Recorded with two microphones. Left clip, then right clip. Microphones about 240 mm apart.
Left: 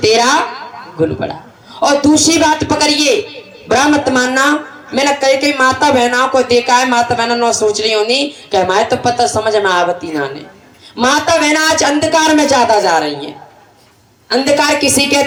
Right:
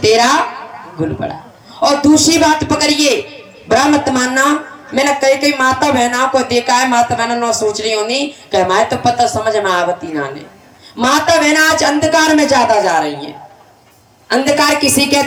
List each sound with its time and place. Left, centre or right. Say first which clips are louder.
0.0 s a woman's voice: even; centre
1.8 s a woman's voice: even; centre